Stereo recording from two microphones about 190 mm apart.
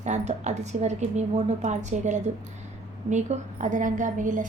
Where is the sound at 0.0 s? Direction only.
35° right (ahead or behind).